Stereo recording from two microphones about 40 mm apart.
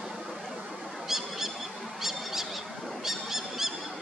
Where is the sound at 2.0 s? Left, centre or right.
Centre.